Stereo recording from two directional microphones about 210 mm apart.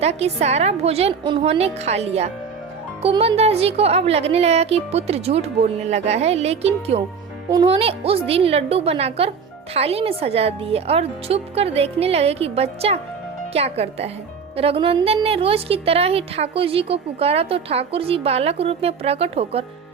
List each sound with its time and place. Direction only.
0.0 s a woman's voice: 30° right (ahead or behind)